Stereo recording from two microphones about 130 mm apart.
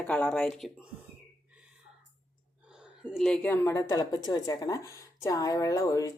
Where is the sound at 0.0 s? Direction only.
10° left (ahead or behind).